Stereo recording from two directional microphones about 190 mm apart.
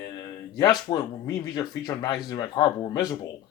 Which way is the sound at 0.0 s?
20° left (ahead or behind).